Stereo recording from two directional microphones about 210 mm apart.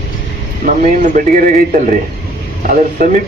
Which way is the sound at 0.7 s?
40° right (ahead or behind).